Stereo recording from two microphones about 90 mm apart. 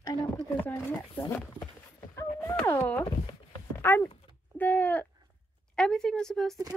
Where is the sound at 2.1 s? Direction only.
30° left (ahead or behind).